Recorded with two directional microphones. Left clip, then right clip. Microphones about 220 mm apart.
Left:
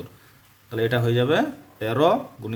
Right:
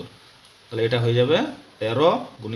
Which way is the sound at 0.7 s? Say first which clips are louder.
Right 1 dB; 30° left (ahead or behind).